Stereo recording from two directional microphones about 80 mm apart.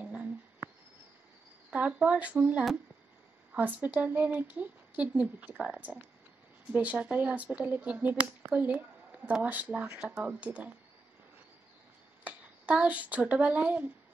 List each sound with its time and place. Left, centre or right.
0.0 s a sound: centre
1.7 s speech: centre
12.3 s speech: centre